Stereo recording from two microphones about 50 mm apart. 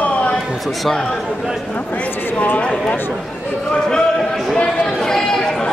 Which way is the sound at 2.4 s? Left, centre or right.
Left.